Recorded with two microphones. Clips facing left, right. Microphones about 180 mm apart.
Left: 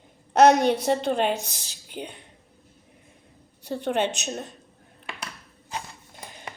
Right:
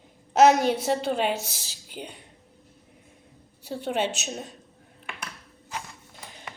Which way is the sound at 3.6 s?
5° right (ahead or behind).